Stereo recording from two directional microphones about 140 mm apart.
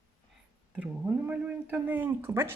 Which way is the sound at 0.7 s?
10° right (ahead or behind).